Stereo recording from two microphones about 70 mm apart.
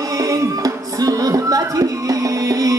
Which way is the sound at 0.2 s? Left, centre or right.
Right.